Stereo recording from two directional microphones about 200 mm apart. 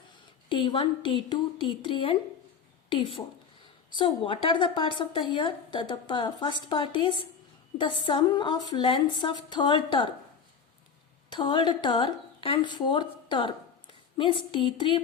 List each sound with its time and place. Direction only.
0.4 s speech: 25° left (ahead or behind)
11.3 s a woman's voice: 25° left (ahead or behind)